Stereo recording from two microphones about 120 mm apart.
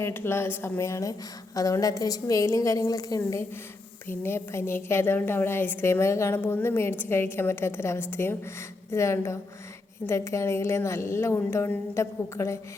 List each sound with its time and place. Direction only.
0.0 s a woman's voice: 20° left (ahead or behind)